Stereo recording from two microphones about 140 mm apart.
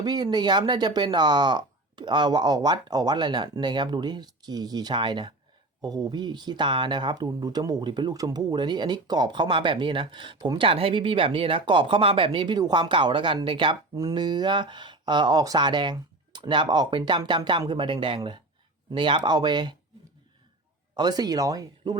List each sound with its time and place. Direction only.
0.0 s speech: 30° right (ahead or behind)
20.9 s speech: 30° right (ahead or behind)